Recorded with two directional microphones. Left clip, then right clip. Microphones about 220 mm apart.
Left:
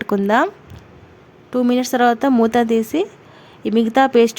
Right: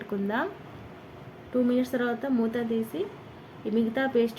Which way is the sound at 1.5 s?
50° left (ahead or behind).